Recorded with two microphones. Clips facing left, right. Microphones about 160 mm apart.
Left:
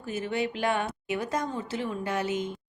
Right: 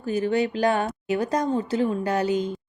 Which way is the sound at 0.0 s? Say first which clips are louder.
Right 7 dB; 35° right (ahead or behind).